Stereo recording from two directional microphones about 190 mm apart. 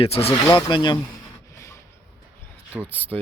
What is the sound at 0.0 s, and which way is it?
Speech, 30° left (ahead or behind).